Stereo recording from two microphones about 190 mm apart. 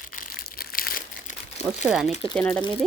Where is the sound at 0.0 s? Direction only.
45° left (ahead or behind).